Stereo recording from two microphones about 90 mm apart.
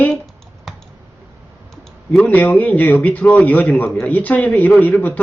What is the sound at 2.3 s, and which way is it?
A man's voice, 20° left (ahead or behind).